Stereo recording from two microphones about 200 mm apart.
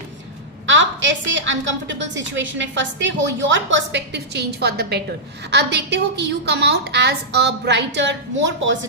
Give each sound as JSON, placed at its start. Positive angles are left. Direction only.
{"t": 0.7, "sound": "a woman's voice", "side_deg": -65}